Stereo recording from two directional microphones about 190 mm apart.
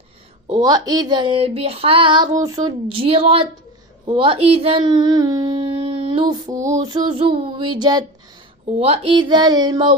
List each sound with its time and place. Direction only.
0.4 s speech: 20° right (ahead or behind)